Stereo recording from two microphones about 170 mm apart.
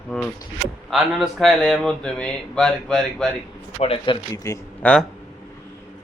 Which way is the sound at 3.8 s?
35° left (ahead or behind).